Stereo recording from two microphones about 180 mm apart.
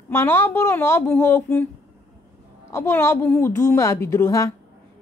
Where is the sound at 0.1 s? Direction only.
10° left (ahead or behind).